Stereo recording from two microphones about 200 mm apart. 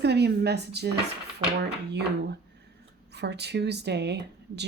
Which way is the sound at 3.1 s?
55° right (ahead or behind).